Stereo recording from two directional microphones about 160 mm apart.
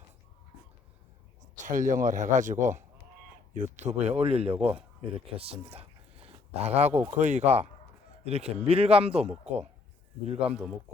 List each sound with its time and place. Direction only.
1.6 s a man's voice: 55° right (ahead or behind); by 10.5 s 40° right (ahead or behind)